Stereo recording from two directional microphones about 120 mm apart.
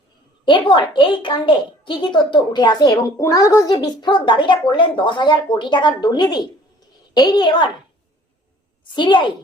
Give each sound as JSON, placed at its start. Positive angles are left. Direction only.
{"t": 0.4, "sound": "a woman's voice", "side_deg": 45}
{"t": 8.9, "sound": "a woman's voice", "side_deg": 40}